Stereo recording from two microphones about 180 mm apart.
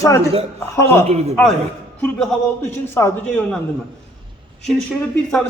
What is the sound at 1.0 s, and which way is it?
Speech, 35° right (ahead or behind).